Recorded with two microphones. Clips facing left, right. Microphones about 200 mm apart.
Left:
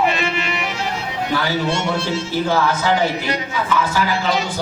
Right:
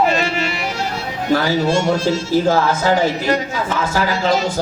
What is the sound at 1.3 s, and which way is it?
Speech, 40° right (ahead or behind).